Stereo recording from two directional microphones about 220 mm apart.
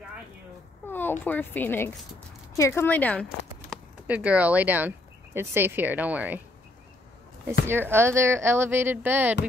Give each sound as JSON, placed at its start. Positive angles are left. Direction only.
{"t": 0.8, "sound": "speech", "side_deg": 10}
{"t": 7.6, "sound": "speech", "side_deg": -10}